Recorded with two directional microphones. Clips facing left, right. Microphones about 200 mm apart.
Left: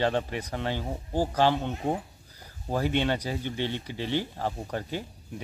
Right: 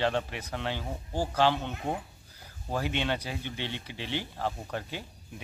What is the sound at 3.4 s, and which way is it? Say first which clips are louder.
Speech: left 6 dB; 45° left (ahead or behind).